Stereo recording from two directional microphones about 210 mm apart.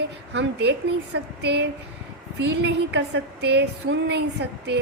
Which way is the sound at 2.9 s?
55° right (ahead or behind).